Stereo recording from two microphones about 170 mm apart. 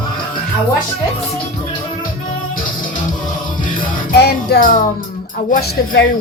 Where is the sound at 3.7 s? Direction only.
70° left (ahead or behind).